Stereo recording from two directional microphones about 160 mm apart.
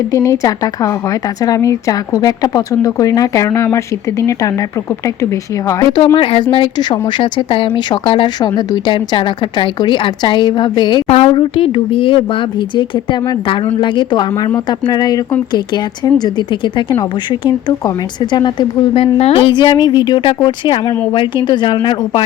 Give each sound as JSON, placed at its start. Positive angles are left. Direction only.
{"t": 0.1, "sound": "a woman's voice", "side_deg": 20}
{"t": 6.1, "sound": "a woman's voice", "side_deg": 35}